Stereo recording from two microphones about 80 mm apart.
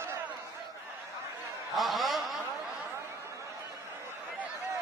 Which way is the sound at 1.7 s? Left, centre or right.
Centre.